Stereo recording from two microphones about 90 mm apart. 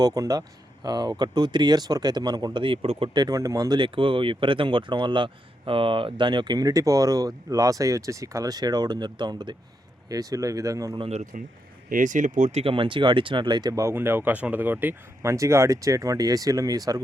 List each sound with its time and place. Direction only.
0.0 s speech: 45° right (ahead or behind); by 3.1 s 80° right
3.2 s speech: 40° right (ahead or behind)
3.8 s speech: 70° right (ahead or behind)
10.1 s speech: 40° right (ahead or behind)
12.6 s speech: 70° right (ahead or behind); by 13.7 s 50° right (ahead or behind)
13.7 s speech: 30° right (ahead or behind)